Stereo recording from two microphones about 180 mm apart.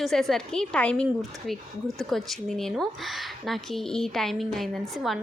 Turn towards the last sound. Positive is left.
turn(degrees=0)  # may be behind; listen again after turning